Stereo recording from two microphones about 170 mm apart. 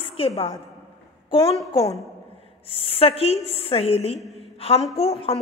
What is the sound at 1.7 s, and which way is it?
Speech, 20° left (ahead or behind).